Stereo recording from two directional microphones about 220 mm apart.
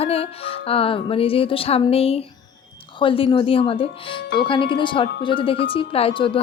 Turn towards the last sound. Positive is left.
turn(degrees=25)  # may be behind; listen again after turning